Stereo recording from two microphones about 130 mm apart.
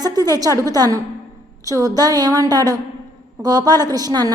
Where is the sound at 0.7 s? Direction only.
25° right (ahead or behind).